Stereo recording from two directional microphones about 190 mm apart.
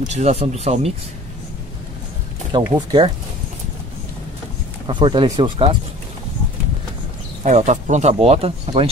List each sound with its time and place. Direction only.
0.1 s speech: 35° right (ahead or behind)
2.6 s speech: 20° right (ahead or behind)
4.8 s speech: 25° right (ahead or behind)
7.4 s speech: 40° right (ahead or behind)